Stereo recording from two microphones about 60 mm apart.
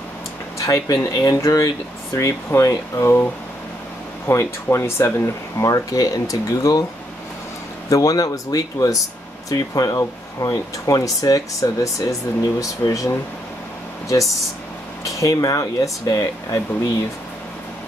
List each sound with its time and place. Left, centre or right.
0.6 s speech: left
4.3 s speech: left
5.6 s speech: left
7.9 s speech: left
15.0 s speech: left